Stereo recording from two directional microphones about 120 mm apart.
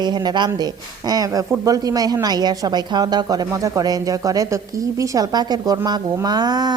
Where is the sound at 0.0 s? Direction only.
35° right (ahead or behind).